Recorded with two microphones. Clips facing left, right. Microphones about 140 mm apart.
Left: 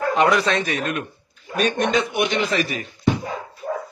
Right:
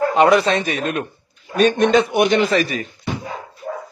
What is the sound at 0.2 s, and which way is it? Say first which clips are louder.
Speech: right 5 dB; 30° right (ahead or behind).